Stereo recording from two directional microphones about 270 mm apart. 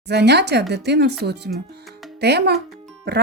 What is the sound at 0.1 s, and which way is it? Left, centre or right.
Speech, right.